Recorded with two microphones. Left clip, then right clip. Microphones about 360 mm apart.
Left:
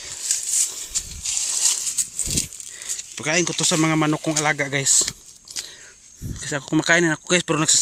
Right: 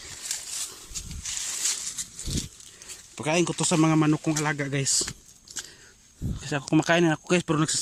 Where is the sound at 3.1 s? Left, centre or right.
Centre.